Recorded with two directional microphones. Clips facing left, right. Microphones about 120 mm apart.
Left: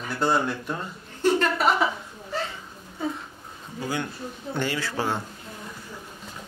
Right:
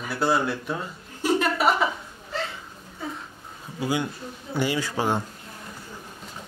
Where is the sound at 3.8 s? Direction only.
10° right (ahead or behind).